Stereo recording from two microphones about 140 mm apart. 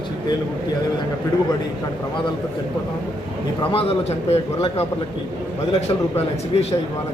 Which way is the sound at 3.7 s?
45° left (ahead or behind).